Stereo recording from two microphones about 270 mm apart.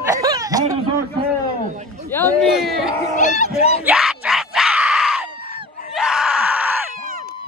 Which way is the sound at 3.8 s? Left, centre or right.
Centre.